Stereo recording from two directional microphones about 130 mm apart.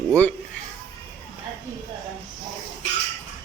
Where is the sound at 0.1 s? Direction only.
10° left (ahead or behind).